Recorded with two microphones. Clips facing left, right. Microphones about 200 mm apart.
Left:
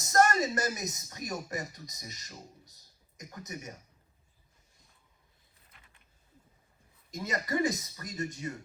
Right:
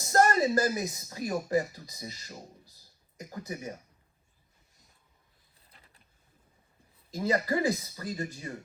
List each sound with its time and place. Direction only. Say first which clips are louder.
0.0 s speech: right 2 dB; 30° right (ahead or behind)
5.7 s a sound: right 2 dB; 35° right (ahead or behind)
7.1 s speech: right 5 dB; 30° right (ahead or behind)